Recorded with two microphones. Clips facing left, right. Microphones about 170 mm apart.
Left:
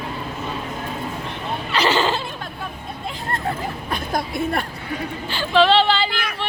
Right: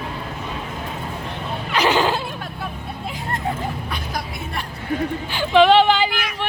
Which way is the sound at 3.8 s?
50° left (ahead or behind).